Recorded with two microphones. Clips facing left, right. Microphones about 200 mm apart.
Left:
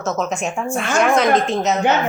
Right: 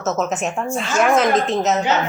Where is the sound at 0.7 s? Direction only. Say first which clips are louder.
Left 2 dB; 55° left (ahead or behind).